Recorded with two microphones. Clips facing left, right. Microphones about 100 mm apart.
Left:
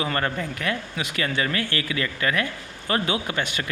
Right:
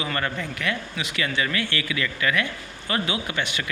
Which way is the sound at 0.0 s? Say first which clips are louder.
Left 2 dB; 35° left (ahead or behind).